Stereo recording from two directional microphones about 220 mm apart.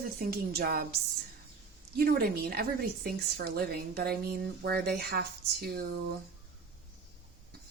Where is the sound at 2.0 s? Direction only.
45° right (ahead or behind).